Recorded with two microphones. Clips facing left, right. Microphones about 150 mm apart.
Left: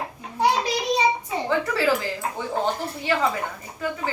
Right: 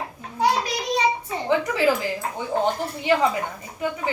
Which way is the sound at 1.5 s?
15° right (ahead or behind).